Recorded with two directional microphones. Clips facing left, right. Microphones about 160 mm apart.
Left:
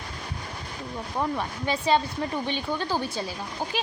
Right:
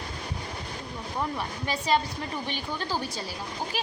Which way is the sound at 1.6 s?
25° left (ahead or behind).